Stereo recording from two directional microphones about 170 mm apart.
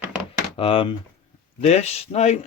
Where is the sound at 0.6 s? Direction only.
35° left (ahead or behind).